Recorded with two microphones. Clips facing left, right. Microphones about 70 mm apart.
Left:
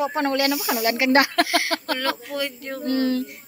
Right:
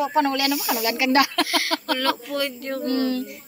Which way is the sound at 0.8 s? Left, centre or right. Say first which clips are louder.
Left 2 dB; left.